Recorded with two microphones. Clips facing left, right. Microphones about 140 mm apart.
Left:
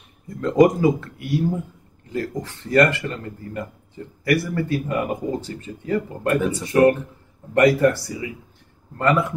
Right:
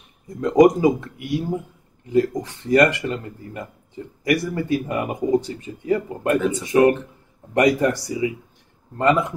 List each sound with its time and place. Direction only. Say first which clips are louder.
0.4 s speech: right 2 dB; 15° right (ahead or behind)